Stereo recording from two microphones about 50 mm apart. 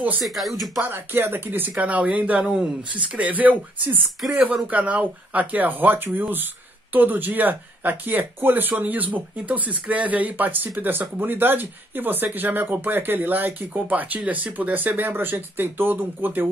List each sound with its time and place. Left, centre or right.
0.2 s speech: centre
0.7 s speech: right; by 2.7 s centre
3.0 s speech: right